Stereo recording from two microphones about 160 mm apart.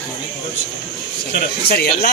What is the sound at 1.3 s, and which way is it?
Speech, 75° left (ahead or behind).